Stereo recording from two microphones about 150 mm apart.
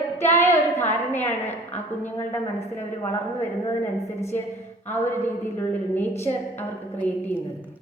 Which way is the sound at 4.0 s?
15° left (ahead or behind).